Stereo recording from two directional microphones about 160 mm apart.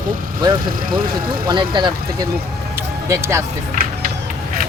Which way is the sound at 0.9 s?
60° right (ahead or behind).